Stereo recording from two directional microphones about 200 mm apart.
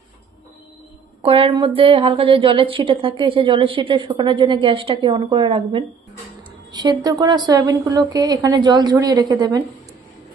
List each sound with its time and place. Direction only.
1.2 s a woman's voice: 25° right (ahead or behind)